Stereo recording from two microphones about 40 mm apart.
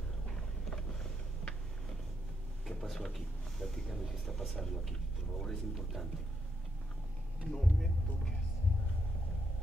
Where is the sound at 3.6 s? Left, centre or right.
Centre.